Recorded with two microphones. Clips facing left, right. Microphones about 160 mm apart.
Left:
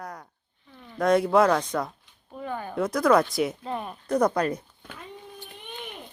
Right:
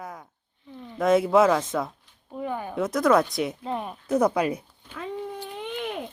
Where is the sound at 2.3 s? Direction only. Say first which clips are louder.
Right 3 dB; 15° right (ahead or behind).